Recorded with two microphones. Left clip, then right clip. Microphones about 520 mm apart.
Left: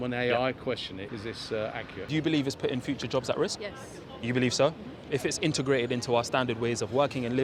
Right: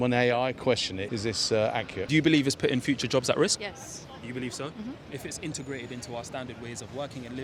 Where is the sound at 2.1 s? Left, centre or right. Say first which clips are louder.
Right 5 dB; centre.